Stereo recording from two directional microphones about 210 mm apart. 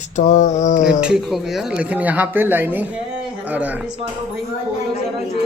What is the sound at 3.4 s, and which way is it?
Speech, 5° right (ahead or behind).